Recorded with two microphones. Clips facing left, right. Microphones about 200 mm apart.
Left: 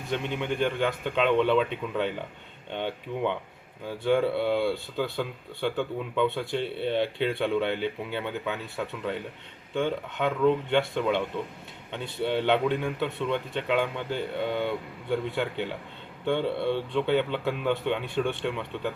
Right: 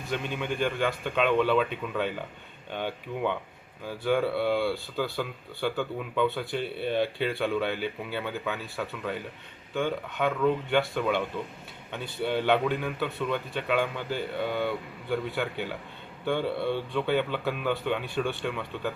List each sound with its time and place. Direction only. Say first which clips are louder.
0.1 s speech: left 2 dB; 20° left (ahead or behind)